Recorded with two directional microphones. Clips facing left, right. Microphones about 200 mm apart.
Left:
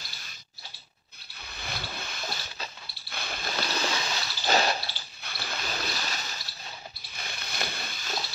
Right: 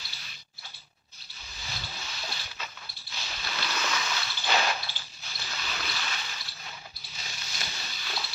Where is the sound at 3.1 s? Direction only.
55° left (ahead or behind).